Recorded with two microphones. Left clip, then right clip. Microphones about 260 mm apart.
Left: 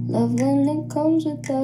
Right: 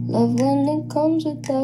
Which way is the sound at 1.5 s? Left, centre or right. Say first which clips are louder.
Right 2 dB; right.